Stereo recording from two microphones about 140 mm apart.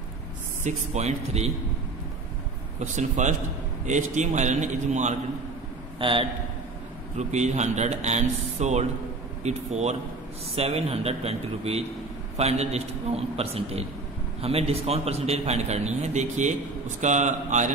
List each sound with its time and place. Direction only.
0.7 s speech: 55° right (ahead or behind)
2.8 s a man's voice: 60° right (ahead or behind)
5.9 s a man's voice: 40° right (ahead or behind)
7.2 s a man's voice: 55° right (ahead or behind)